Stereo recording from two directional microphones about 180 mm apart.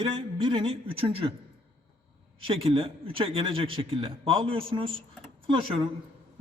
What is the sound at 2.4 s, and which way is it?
A man's voice, 30° right (ahead or behind).